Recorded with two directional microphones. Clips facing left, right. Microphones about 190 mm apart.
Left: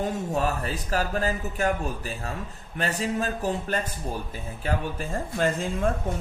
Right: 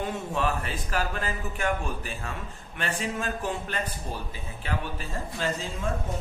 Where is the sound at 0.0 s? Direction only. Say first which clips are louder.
Left 3 dB; 40° left (ahead or behind).